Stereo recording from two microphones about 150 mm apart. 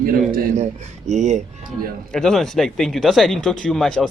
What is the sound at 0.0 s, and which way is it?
Speech, 70° right (ahead or behind).